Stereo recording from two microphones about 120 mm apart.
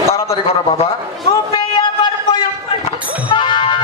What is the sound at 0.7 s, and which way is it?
Speech, 55° left (ahead or behind).